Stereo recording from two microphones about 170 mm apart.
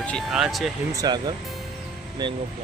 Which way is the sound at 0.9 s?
25° right (ahead or behind).